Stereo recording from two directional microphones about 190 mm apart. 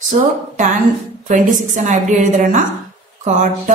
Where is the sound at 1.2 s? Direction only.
40° right (ahead or behind).